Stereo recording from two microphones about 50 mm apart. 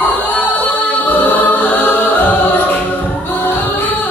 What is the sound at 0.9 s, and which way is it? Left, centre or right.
Choir, left.